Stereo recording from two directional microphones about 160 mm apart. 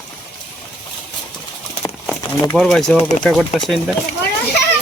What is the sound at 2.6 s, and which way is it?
Speech, 5° left (ahead or behind).